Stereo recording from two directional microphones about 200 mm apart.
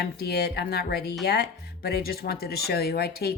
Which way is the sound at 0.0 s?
50° left (ahead or behind).